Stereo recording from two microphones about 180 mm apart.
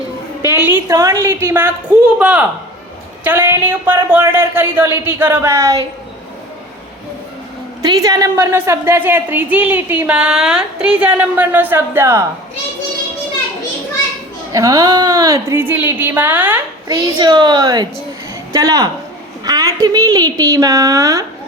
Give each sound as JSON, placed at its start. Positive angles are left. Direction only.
{"t": 0.4, "sound": "a woman's voice", "side_deg": -15}
{"t": 7.8, "sound": "a woman's voice", "side_deg": -20}
{"t": 14.5, "sound": "a woman's voice", "side_deg": -20}
{"t": 17.2, "sound": "a woman's voice", "side_deg": -25}